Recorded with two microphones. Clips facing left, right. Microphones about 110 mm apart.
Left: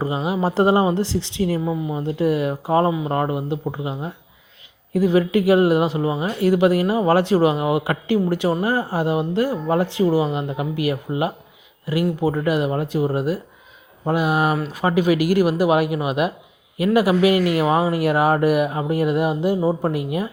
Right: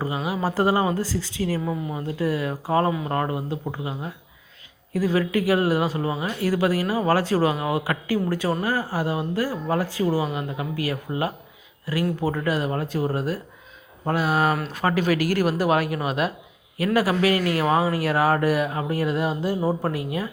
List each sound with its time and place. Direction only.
0.0 s speech: 25° left (ahead or behind)